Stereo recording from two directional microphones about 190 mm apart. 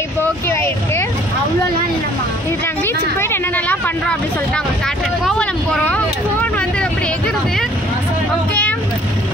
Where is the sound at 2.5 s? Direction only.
10° left (ahead or behind).